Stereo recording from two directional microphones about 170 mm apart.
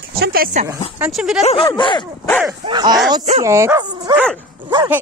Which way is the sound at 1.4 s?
30° left (ahead or behind).